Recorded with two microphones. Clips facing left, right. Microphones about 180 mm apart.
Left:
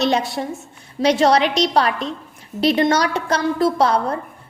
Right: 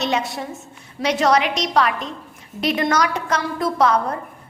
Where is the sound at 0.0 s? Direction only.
35° left (ahead or behind).